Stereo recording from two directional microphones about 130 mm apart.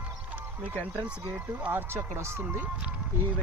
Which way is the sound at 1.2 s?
15° right (ahead or behind).